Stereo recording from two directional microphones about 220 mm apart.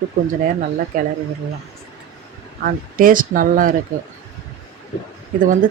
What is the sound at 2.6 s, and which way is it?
Speech, 40° right (ahead or behind).